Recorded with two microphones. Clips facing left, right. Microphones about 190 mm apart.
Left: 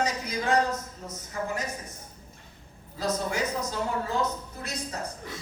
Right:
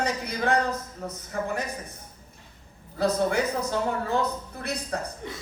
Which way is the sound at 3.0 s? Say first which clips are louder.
Right 5 dB; 60° right (ahead or behind).